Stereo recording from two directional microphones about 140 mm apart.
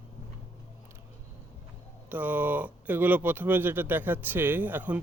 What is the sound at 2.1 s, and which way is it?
Speech, 15° right (ahead or behind).